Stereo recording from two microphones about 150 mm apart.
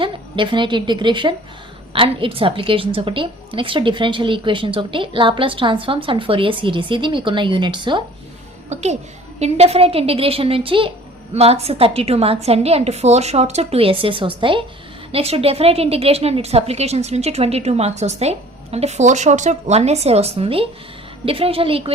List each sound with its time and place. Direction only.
0.0 s a woman's voice: 30° right (ahead or behind)
8.7 s a woman's voice: 50° right (ahead or behind)